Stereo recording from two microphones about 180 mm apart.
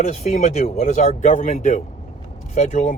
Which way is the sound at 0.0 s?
40° left (ahead or behind).